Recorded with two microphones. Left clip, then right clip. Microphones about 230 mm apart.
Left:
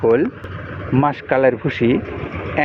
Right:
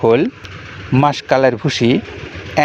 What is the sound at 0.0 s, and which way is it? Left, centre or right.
Speech, right.